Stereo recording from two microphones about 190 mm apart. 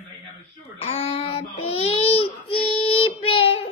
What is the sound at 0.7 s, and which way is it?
Baby cry, 30° left (ahead or behind).